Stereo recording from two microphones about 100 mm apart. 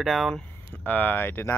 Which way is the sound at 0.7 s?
15° left (ahead or behind).